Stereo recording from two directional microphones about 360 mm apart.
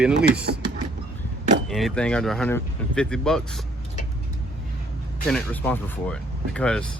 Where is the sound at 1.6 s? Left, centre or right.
Centre.